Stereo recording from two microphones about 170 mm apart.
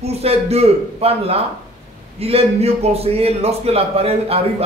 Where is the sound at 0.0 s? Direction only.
35° right (ahead or behind).